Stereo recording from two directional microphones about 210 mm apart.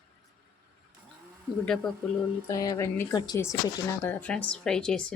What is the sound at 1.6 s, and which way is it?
Speech, centre (ahead or behind).